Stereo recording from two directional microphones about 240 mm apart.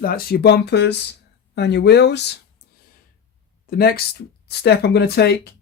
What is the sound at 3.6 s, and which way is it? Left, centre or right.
Speech, left.